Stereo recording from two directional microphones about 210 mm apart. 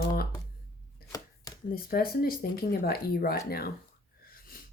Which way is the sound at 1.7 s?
45° left (ahead or behind).